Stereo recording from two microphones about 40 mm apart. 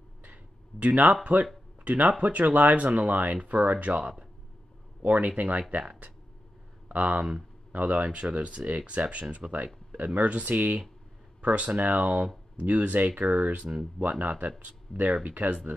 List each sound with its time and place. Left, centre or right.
0.2 s a sound: right
1.2 s speech: right
4.0 s speech: right
5.0 s speech: right
9.9 s speech: right